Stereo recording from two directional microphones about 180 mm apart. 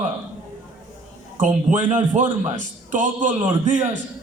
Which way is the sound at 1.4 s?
45° right (ahead or behind).